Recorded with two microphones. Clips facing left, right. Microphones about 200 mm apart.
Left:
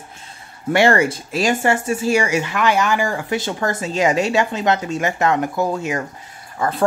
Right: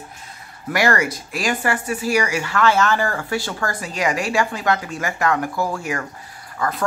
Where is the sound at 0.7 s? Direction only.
25° left (ahead or behind).